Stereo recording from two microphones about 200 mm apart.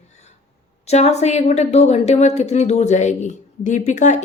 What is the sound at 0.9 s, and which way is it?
A woman's voice, 35° left (ahead or behind).